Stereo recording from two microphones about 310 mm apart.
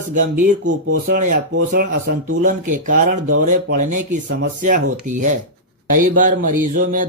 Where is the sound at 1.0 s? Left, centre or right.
Right.